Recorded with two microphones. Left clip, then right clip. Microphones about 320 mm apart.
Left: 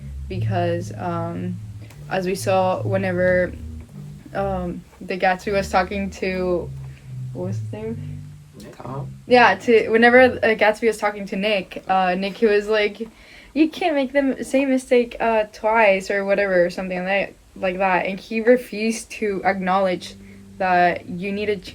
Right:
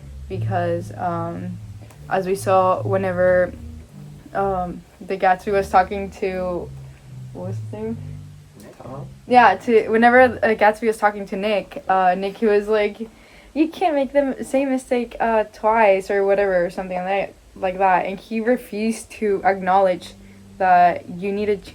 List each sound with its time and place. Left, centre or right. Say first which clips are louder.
0.3 s a woman's voice: right 1 dB; centre
9.3 s a woman's voice: right 1 dB; centre